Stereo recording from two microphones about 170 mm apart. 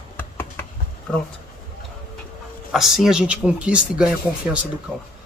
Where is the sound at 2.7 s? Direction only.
Centre (ahead or behind).